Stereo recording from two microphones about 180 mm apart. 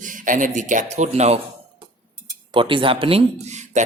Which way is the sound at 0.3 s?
45° right (ahead or behind).